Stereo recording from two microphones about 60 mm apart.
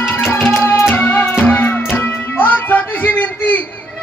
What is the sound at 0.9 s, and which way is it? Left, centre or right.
Music, left.